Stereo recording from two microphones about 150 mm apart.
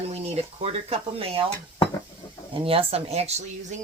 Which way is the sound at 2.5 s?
40° right (ahead or behind).